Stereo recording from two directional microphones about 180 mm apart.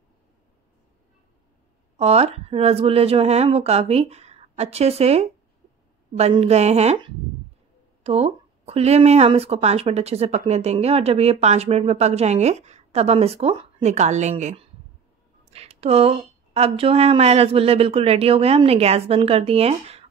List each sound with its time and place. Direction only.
2.0 s speech: 35° right (ahead or behind)